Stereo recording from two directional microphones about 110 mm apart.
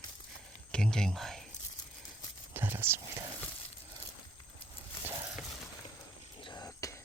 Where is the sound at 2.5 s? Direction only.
20° right (ahead or behind).